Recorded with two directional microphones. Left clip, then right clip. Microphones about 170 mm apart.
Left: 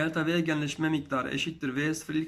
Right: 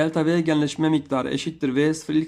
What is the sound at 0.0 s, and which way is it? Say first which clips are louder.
Speech: right 7 dB; 30° right (ahead or behind).